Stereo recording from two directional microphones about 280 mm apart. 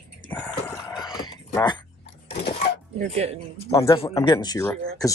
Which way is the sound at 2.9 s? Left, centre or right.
Right.